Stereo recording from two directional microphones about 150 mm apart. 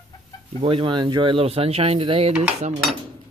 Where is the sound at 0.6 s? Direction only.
35° right (ahead or behind).